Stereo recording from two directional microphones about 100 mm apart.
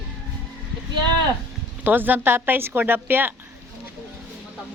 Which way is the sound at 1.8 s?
20° right (ahead or behind).